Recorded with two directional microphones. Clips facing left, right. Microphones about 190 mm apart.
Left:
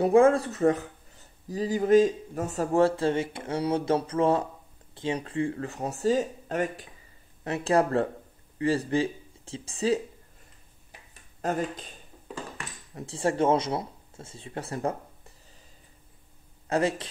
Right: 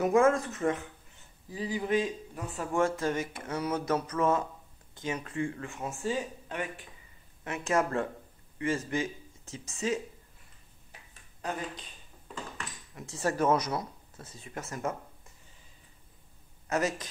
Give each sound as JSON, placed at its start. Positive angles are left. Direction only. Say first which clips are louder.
{"t": 0.0, "sound": "speech", "louder": "left 5 dB", "side_deg": 30}
{"t": 11.4, "sound": "speech", "louder": "left 7 dB", "side_deg": 45}
{"t": 12.9, "sound": "speech", "louder": "left 4 dB", "side_deg": 30}
{"t": 16.6, "sound": "speech", "louder": "left 4 dB", "side_deg": 30}